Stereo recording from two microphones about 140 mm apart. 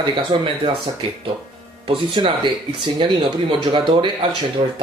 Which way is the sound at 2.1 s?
35° right (ahead or behind).